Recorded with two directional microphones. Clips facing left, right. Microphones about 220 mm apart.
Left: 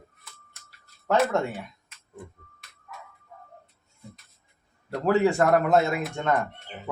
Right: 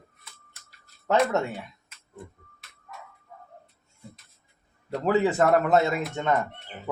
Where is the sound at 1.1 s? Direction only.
5° left (ahead or behind).